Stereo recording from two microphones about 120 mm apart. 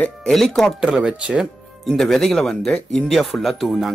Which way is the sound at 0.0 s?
5° left (ahead or behind).